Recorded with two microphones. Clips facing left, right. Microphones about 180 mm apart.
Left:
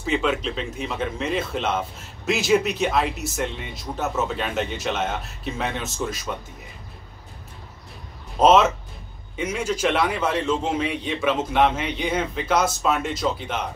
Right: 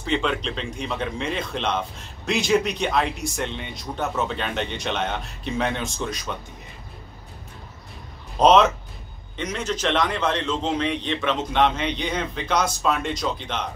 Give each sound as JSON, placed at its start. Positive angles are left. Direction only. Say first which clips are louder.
{"t": 0.0, "sound": "speech", "louder": "left 1 dB", "side_deg": 5}
{"t": 8.4, "sound": "a man's voice", "louder": "even", "side_deg": 5}